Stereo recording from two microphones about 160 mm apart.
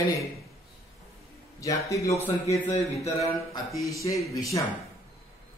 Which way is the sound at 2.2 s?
40° left (ahead or behind).